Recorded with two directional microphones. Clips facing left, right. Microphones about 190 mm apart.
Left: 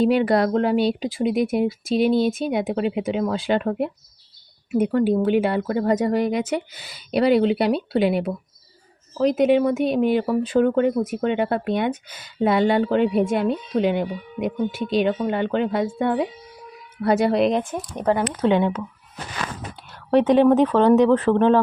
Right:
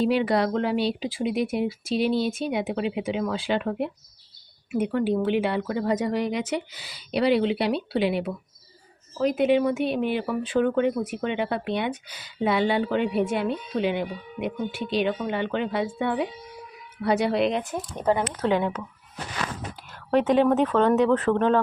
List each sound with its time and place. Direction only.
0.0 s speech: 50° left (ahead or behind)
18.4 s speech: 25° left (ahead or behind)
20.1 s speech: 35° left (ahead or behind)